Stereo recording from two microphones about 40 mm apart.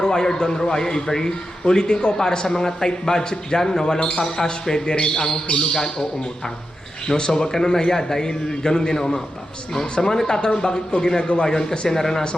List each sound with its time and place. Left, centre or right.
0.0 s a man's voice: centre
7.1 s a man's voice: centre